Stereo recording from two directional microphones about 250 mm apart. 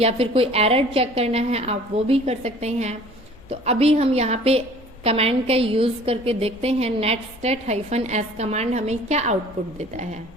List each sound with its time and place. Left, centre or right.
0.0 s a woman's voice: right